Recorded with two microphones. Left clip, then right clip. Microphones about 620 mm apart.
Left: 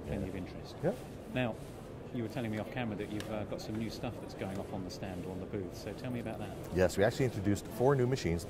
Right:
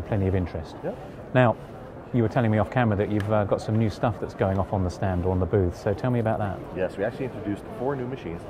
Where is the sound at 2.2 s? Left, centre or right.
Right.